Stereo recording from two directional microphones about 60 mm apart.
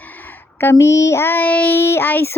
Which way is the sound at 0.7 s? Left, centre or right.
Left.